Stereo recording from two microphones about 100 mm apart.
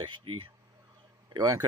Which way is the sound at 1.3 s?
45° right (ahead or behind).